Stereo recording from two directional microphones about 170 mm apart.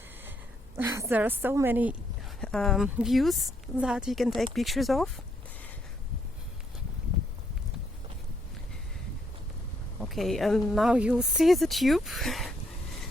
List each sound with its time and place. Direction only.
0.8 s a woman's voice: 15° right (ahead or behind)
2.4 s a woman's voice: 5° left (ahead or behind)
10.0 s a woman's voice: centre (ahead or behind)